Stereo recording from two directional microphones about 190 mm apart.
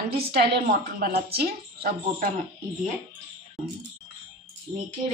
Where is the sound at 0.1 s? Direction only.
55° right (ahead or behind).